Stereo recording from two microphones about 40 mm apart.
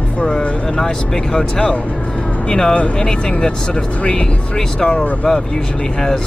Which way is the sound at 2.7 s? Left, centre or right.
Left.